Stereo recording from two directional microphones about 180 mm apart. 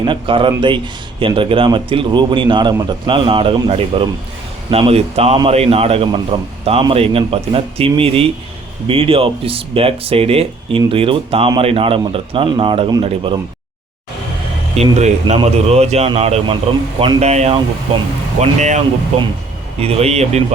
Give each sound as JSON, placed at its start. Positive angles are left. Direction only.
{"t": 0.0, "sound": "speech", "side_deg": -30}
{"t": 14.9, "sound": "speech", "side_deg": -40}
{"t": 19.8, "sound": "speech", "side_deg": -35}